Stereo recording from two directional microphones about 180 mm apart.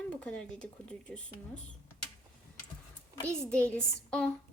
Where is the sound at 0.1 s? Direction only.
5° left (ahead or behind).